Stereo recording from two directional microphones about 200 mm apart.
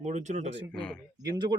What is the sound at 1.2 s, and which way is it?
Speech, 20° right (ahead or behind).